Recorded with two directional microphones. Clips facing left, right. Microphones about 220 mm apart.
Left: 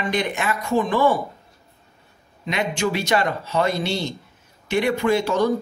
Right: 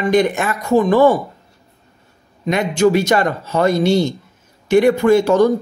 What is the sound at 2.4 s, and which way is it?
Speech, 45° right (ahead or behind).